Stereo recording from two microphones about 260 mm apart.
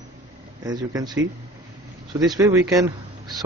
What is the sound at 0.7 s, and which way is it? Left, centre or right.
Speech, centre.